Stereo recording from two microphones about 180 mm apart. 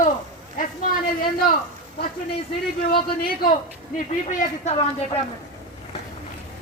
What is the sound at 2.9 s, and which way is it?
A man's voice, 55° left (ahead or behind).